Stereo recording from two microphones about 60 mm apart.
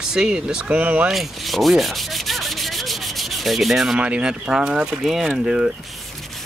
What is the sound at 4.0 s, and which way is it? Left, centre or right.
Speech, centre.